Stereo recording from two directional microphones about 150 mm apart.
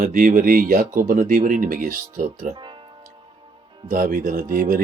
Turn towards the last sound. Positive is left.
turn(degrees=-70)  # may be behind; listen again after turning